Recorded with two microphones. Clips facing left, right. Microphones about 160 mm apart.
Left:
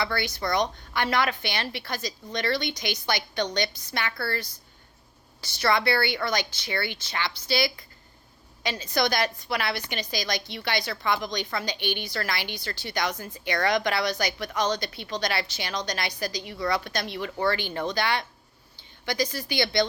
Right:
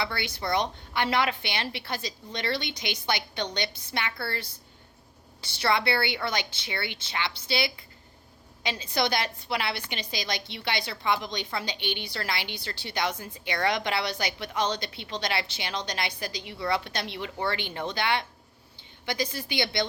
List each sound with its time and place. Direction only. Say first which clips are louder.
0.0 s a woman's voice: left 3 dB; 25° right (ahead or behind)
8.6 s a woman's voice: left 2 dB; 25° right (ahead or behind)